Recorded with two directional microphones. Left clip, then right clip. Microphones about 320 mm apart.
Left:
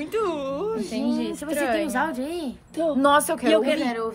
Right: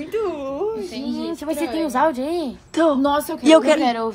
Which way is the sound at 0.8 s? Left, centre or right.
Centre.